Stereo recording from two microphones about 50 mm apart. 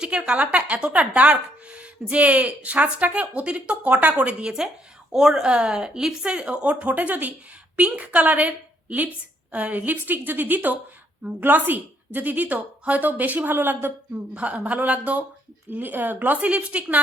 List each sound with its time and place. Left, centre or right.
0.0 s speech: right
5.1 s a woman's voice: centre
6.2 s a woman's voice: right
14.3 s a woman's voice: right